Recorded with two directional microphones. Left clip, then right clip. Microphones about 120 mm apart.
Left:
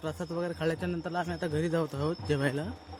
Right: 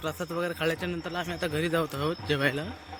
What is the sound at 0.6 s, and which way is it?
A man's voice, 45° left (ahead or behind).